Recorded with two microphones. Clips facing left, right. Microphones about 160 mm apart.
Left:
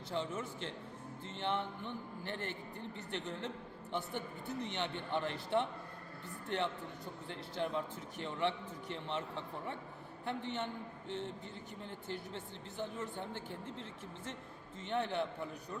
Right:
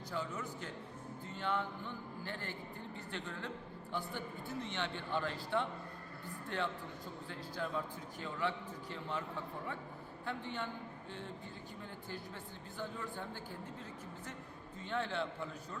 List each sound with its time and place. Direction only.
0.1 s a man's voice: 25° left (ahead or behind)
7.3 s a man's voice: 20° left (ahead or behind)
12.0 s a man's voice: 20° left (ahead or behind)